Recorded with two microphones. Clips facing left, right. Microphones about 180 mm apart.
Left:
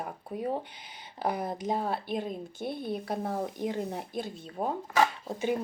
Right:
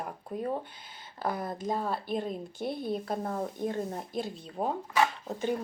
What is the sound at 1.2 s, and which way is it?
Speech, 20° left (ahead or behind).